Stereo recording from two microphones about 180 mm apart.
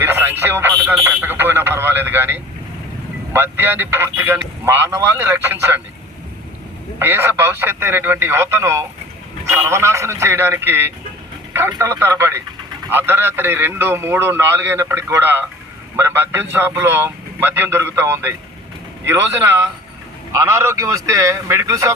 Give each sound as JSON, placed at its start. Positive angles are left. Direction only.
{"t": 0.0, "sound": "a man's voice", "side_deg": -10}
{"t": 7.0, "sound": "a man's voice", "side_deg": -10}